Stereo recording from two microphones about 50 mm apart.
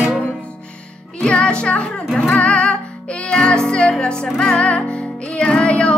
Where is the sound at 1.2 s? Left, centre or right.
Centre.